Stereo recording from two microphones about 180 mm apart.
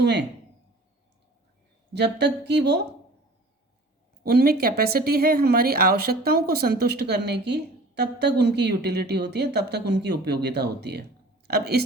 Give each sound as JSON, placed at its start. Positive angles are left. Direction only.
{"t": 0.0, "sound": "speech", "side_deg": -70}
{"t": 1.9, "sound": "speech", "side_deg": -70}
{"t": 4.2, "sound": "speech", "side_deg": -60}